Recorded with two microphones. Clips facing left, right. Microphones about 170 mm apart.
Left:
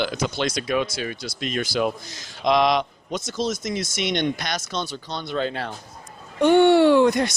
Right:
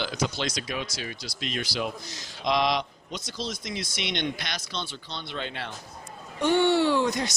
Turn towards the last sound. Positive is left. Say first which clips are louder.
# left 8 dB
turn(degrees=55)  # may be behind; listen again after turning